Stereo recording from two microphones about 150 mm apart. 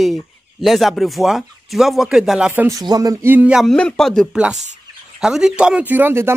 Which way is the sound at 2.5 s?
20° right (ahead or behind).